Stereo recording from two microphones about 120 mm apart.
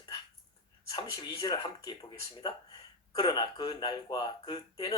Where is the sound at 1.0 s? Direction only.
40° left (ahead or behind).